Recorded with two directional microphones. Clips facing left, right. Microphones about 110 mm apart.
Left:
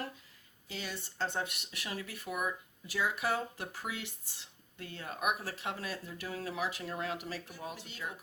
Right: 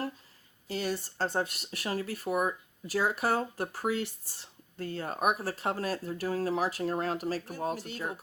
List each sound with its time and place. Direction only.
0.7 s speech: 45° right (ahead or behind)